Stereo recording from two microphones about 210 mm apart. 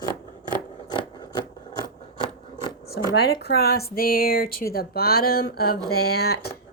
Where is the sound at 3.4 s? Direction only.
50° left (ahead or behind).